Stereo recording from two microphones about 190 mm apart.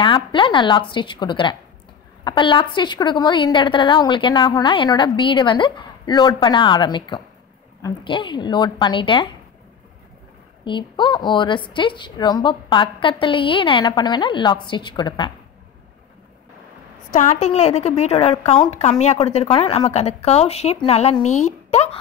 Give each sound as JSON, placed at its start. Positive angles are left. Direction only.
{"t": 0.0, "sound": "a woman's voice", "side_deg": 25}
{"t": 10.6, "sound": "a woman's voice", "side_deg": 25}
{"t": 17.1, "sound": "a woman's voice", "side_deg": 40}